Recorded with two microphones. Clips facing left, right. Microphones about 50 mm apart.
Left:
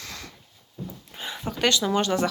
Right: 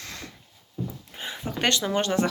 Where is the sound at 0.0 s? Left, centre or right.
Right.